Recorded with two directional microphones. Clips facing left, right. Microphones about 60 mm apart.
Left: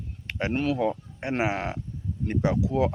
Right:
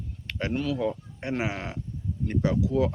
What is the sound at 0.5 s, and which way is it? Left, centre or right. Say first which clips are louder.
Speech: left 2 dB; left.